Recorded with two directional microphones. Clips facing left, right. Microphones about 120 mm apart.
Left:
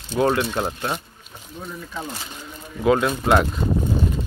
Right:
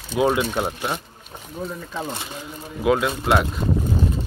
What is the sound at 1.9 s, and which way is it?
Speech, 25° right (ahead or behind).